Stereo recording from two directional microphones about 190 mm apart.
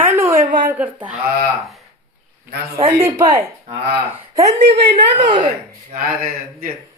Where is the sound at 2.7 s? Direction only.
15° right (ahead or behind).